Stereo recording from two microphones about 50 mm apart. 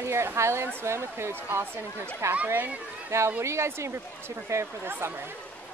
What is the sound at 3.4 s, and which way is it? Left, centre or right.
Speech, right.